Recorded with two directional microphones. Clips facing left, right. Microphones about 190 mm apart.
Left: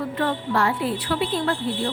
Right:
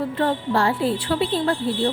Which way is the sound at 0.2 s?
30° right (ahead or behind).